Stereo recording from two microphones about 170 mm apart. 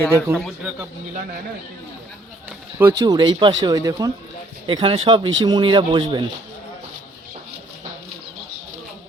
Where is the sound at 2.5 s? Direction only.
10° right (ahead or behind).